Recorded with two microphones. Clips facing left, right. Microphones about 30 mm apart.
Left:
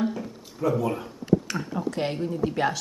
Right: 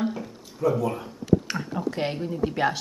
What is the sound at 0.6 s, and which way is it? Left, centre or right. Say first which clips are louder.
A woman's voice: right 1 dB; centre.